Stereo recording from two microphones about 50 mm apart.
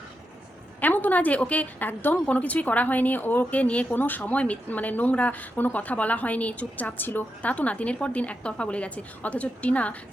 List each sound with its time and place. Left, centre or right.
0.8 s speech: left
2.2 s speech: left
7.5 s a woman's voice: left